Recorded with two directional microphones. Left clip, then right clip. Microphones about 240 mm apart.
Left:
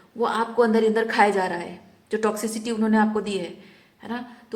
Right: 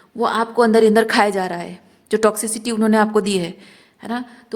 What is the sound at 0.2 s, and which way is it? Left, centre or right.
A man's voice, right.